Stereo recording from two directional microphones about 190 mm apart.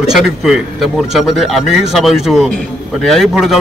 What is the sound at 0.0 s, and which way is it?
A man's voice, centre (ahead or behind).